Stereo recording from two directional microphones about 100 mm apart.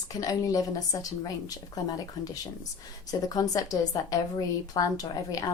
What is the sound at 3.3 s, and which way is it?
A woman's voice, 40° left (ahead or behind).